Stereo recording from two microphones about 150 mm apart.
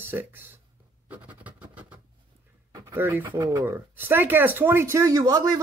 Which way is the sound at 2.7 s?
20° right (ahead or behind).